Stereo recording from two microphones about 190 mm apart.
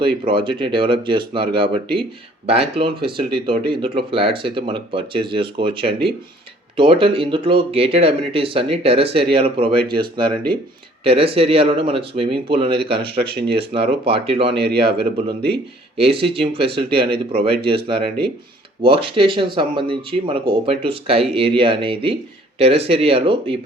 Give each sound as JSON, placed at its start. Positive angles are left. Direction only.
{"t": 0.0, "sound": "speech", "side_deg": -25}
{"t": 12.7, "sound": "speech", "side_deg": -60}
{"t": 14.1, "sound": "speech", "side_deg": -30}
{"t": 14.5, "sound": "speech", "side_deg": -60}
{"t": 16.0, "sound": "speech", "side_deg": -30}